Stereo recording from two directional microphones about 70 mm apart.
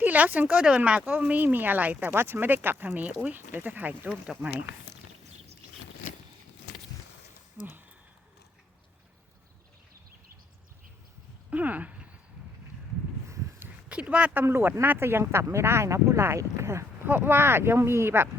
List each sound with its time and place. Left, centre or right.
0.0 s speech: right
7.6 s speech: right
11.5 s speech: right
13.8 s speech: centre
14.4 s speech: right
17.1 s speech: right